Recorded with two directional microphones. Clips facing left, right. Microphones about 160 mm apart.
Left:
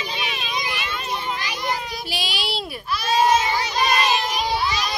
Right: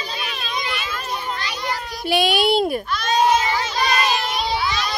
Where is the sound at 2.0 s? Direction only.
55° right (ahead or behind).